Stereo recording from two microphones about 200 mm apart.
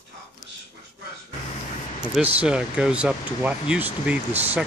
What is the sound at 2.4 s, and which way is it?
Speech, 5° right (ahead or behind).